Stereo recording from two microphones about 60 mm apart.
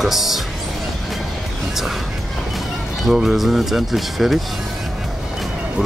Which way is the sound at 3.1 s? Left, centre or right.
Centre.